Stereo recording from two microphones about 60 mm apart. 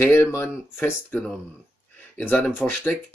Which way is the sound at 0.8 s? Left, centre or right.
Left.